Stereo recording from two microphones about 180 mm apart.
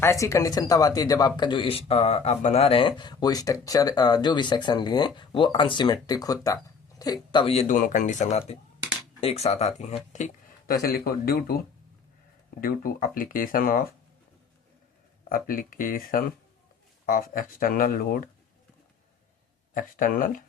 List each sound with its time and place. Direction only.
0.0 s speech: 15° left (ahead or behind); by 10.3 s 40° left (ahead or behind)
10.7 s speech: 55° left (ahead or behind)
15.3 s speech: 50° left (ahead or behind)
19.7 s speech: 50° left (ahead or behind)